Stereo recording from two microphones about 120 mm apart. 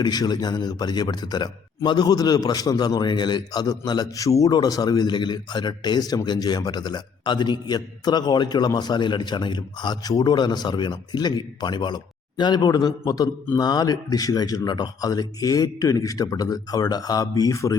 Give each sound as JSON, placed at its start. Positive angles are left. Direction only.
{"t": 0.0, "sound": "a man's voice", "side_deg": 35}